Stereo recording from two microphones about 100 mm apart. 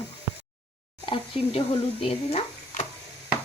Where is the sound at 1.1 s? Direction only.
55° left (ahead or behind).